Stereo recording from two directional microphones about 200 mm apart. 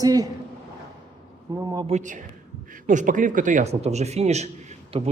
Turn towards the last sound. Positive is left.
turn(degrees=-35)  # may be behind; listen again after turning